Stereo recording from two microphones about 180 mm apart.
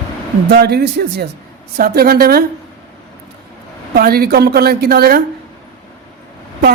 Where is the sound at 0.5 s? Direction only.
65° right (ahead or behind).